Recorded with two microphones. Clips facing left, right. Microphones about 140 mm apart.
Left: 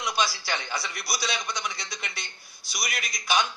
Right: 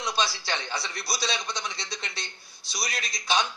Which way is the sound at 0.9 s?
30° right (ahead or behind).